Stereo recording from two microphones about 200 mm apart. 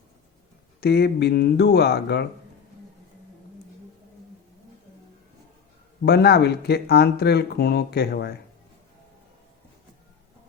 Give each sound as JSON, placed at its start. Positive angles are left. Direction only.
{"t": 0.8, "sound": "speech", "side_deg": 55}
{"t": 6.0, "sound": "speech", "side_deg": 55}